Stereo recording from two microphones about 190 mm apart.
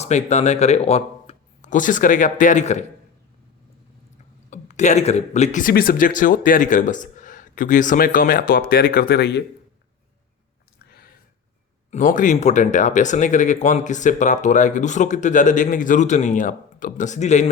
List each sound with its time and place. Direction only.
0.0 s speech: 35° left (ahead or behind)
4.5 s speech: 40° left (ahead or behind); by 9.4 s 60° left (ahead or behind)
11.9 s speech: 40° left (ahead or behind)